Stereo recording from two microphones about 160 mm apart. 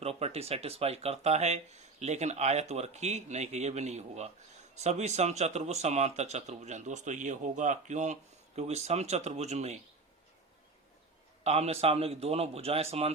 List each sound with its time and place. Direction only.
0.0 s speech: 40° right (ahead or behind)
11.4 s a man's voice: 40° right (ahead or behind)